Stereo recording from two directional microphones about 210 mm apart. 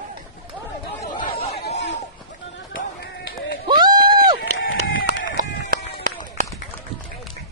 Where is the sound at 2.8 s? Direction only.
55° left (ahead or behind).